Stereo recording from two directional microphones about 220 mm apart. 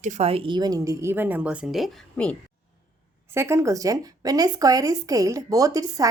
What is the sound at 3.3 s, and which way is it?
Speech, 10° right (ahead or behind).